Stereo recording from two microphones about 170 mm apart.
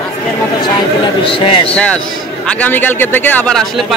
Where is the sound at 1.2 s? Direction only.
30° left (ahead or behind).